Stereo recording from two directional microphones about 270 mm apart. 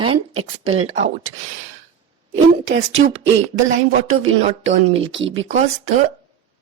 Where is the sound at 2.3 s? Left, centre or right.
Right.